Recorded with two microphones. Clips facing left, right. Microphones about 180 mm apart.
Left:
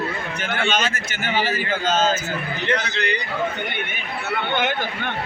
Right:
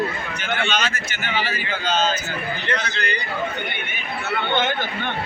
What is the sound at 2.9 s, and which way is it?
Speech, 20° left (ahead or behind).